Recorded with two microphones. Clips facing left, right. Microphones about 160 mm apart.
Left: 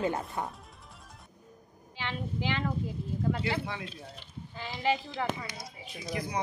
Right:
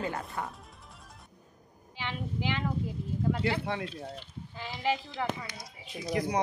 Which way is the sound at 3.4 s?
60° right (ahead or behind).